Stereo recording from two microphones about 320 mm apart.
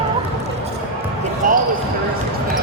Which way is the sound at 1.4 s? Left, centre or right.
Right.